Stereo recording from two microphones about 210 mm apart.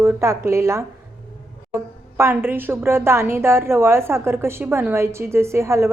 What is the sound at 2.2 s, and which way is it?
A woman's voice, 10° right (ahead or behind).